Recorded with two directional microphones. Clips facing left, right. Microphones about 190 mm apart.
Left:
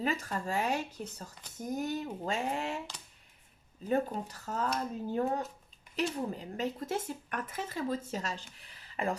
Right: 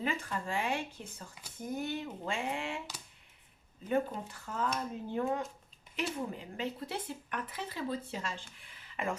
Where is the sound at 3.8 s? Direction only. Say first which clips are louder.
Left 1 dB; 40° left (ahead or behind).